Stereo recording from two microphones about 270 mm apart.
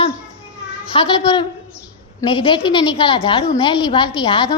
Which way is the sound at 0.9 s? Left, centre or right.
Centre.